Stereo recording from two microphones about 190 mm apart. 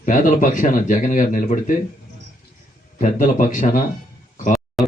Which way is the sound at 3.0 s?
45° left (ahead or behind).